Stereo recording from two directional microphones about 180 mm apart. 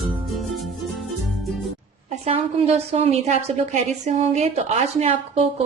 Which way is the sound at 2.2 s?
35° right (ahead or behind).